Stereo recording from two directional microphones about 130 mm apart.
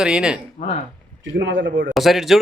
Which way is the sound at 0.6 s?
65° left (ahead or behind).